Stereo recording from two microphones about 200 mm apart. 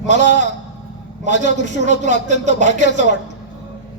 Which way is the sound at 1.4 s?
35° right (ahead or behind).